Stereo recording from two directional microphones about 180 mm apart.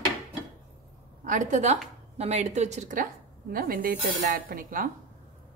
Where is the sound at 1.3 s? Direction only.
40° right (ahead or behind).